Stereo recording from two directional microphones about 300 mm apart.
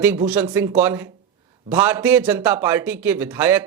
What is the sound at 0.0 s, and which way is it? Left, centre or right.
Speech, centre.